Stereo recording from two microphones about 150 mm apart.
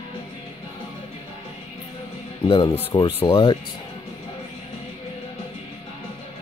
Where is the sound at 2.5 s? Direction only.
35° left (ahead or behind).